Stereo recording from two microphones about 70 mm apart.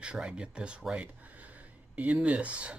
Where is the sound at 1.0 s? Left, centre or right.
Right.